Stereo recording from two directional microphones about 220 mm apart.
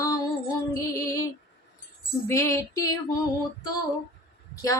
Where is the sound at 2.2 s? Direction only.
15° left (ahead or behind).